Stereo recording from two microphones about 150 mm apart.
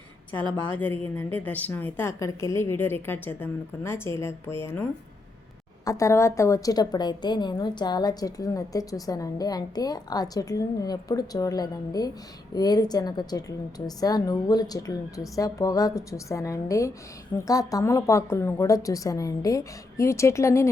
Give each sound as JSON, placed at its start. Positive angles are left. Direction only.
{"t": 0.7, "sound": "a woman's voice", "side_deg": 10}